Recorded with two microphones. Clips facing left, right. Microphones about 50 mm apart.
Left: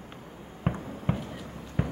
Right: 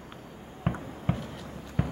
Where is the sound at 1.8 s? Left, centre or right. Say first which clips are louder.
Even; centre.